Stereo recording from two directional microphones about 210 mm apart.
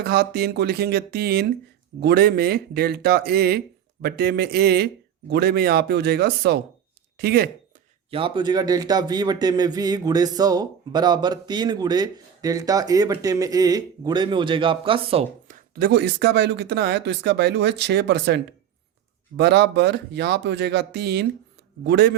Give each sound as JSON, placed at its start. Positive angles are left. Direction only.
{"t": 0.0, "sound": "speech", "side_deg": -50}
{"t": 8.1, "sound": "a man's voice", "side_deg": -25}
{"t": 15.7, "sound": "speech", "side_deg": -50}